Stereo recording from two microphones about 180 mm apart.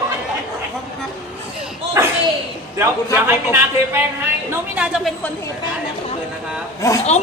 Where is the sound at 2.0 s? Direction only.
15° right (ahead or behind).